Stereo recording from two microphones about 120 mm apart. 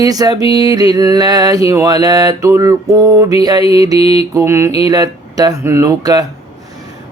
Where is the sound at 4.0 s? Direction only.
55° left (ahead or behind).